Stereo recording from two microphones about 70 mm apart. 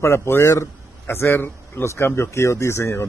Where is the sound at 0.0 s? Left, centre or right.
Left.